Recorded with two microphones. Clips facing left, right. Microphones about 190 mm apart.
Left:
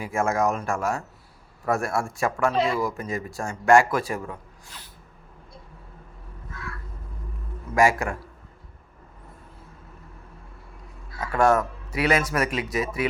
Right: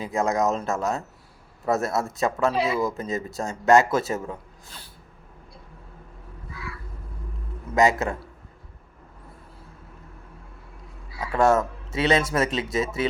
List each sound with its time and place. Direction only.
0.0 s speech: 20° right (ahead or behind)
2.6 s speech: 5° right (ahead or behind)
2.8 s speech: 20° right (ahead or behind)
6.5 s crow: 5° right (ahead or behind)
7.8 s speech: 20° right (ahead or behind)
11.1 s a sound: centre (ahead or behind)
11.3 s speech: 25° right (ahead or behind)